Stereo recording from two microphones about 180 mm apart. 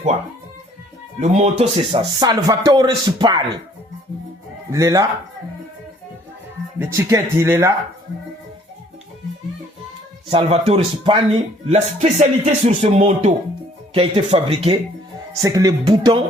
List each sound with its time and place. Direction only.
1.2 s speech: 40° right (ahead or behind); by 3.4 s 25° right (ahead or behind)
4.7 s speech: 20° right (ahead or behind)
6.7 s speech: 15° right (ahead or behind)
10.2 s speech: 35° right (ahead or behind)
15.4 s speech: 20° right (ahead or behind)